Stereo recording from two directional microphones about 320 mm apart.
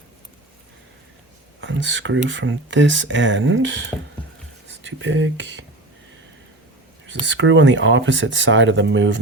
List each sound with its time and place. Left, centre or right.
1.6 s speech: right
7.3 s speech: right